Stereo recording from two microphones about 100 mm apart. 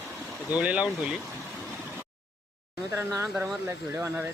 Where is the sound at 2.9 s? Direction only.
25° right (ahead or behind).